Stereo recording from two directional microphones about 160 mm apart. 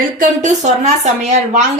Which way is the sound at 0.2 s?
50° right (ahead or behind).